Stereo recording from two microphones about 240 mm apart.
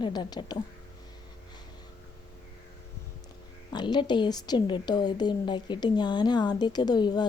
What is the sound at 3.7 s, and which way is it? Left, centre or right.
A woman's voice, centre.